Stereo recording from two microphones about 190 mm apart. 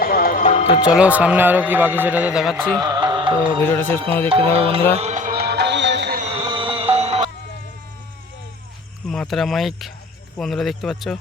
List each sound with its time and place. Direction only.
0.0 s music: 50° left (ahead or behind)
0.9 s a man's voice: 5° right (ahead or behind)
2.8 s music: 20° right (ahead or behind)
3.7 s speech: 10° left (ahead or behind)
4.5 s speech: 30° right (ahead or behind)
4.9 s music: 35° right (ahead or behind); by 6.1 s 65° right (ahead or behind)
6.1 s music: 30° right (ahead or behind)
9.0 s speech: centre (ahead or behind)